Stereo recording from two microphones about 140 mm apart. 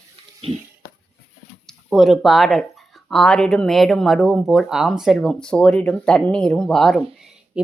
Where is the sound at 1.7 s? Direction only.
Centre (ahead or behind).